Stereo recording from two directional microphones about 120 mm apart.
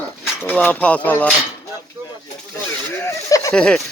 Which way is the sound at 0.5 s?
10° left (ahead or behind).